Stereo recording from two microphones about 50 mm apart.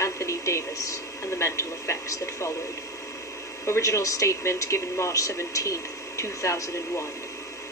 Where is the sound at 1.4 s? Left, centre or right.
Left.